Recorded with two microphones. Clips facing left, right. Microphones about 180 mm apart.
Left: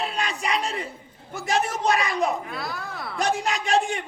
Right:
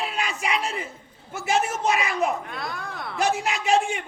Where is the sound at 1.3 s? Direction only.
5° right (ahead or behind).